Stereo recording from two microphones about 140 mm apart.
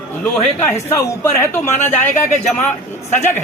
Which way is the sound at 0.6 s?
20° left (ahead or behind).